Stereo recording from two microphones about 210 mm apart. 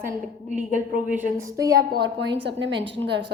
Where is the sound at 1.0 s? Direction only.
10° right (ahead or behind).